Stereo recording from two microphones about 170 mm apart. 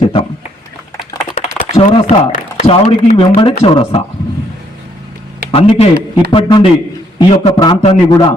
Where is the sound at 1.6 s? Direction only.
35° left (ahead or behind).